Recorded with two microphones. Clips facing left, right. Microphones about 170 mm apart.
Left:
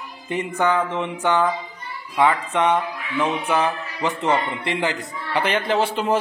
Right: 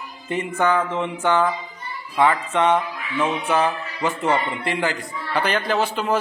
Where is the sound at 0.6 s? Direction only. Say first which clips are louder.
Even; 15° left (ahead or behind).